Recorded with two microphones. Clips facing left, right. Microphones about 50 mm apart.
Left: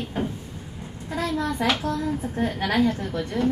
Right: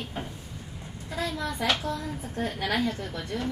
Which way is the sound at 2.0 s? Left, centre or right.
Centre.